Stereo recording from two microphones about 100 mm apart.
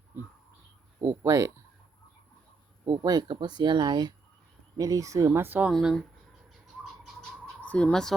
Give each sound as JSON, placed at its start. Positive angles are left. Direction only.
{"t": 1.0, "sound": "speech", "side_deg": -30}
{"t": 2.8, "sound": "speech", "side_deg": -40}
{"t": 5.7, "sound": "speech", "side_deg": 0}
{"t": 7.4, "sound": "fowl", "side_deg": 15}